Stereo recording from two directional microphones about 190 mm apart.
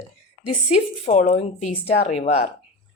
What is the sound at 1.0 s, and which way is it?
Speech, 40° left (ahead or behind).